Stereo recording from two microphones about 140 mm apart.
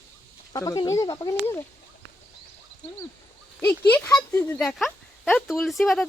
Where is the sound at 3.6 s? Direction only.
15° left (ahead or behind).